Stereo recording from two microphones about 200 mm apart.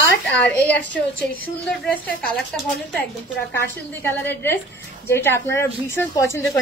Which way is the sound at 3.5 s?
10° left (ahead or behind).